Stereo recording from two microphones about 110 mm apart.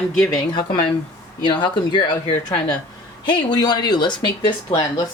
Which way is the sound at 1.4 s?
45° left (ahead or behind).